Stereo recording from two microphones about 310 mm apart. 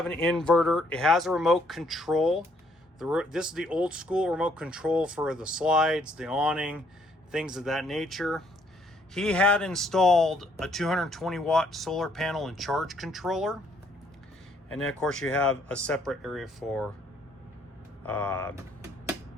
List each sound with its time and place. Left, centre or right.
0.0 s speech: centre
14.7 s speech: centre
18.0 s speech: centre